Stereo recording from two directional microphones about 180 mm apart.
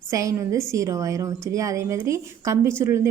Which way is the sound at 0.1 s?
15° right (ahead or behind).